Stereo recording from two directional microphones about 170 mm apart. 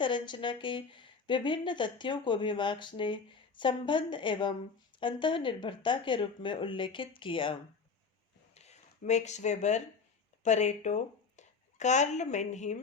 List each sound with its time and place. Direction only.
0.0 s a woman's voice: 30° left (ahead or behind)
8.5 s speech: 40° left (ahead or behind)